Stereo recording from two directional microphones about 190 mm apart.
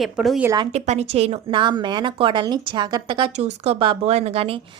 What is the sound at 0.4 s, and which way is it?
Speech, 20° right (ahead or behind).